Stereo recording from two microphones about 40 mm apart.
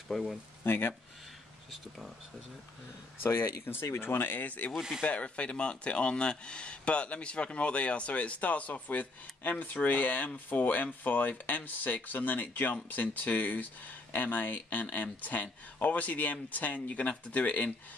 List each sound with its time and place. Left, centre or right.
0.1 s speech: centre
0.7 s speech: left
3.2 s speech: left
4.5 s speech: left
4.7 s speech: centre
5.0 s speech: left